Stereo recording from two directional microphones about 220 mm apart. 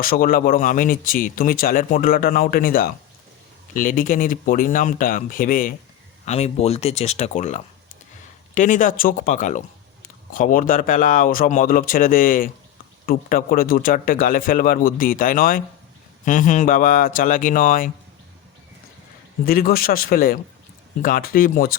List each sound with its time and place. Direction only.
0.0 s speech: 40° left (ahead or behind)
19.5 s speech: 40° left (ahead or behind)